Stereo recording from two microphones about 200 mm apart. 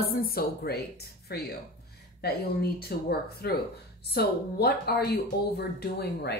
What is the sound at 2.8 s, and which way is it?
A woman's voice, 50° left (ahead or behind).